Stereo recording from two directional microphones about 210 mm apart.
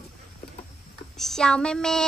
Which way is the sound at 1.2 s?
Centre (ahead or behind).